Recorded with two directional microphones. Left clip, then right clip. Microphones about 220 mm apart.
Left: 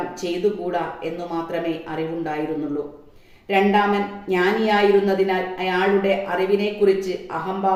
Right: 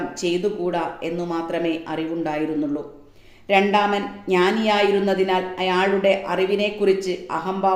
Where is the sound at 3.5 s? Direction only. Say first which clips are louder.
Even; 50° right (ahead or behind).